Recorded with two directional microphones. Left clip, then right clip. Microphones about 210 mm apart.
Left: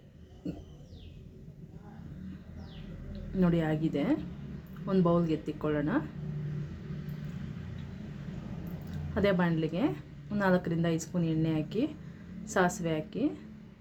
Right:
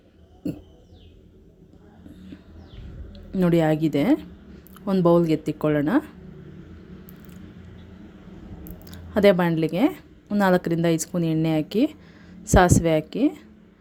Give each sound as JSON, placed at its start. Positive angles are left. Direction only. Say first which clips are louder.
{"t": 3.1, "sound": "a woman's voice", "louder": "right 9 dB", "side_deg": -40}
{"t": 8.9, "sound": "a woman's voice", "louder": "right 12 dB", "side_deg": -45}